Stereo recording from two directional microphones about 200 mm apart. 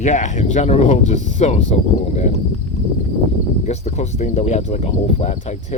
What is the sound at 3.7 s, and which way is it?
Speech, 35° left (ahead or behind).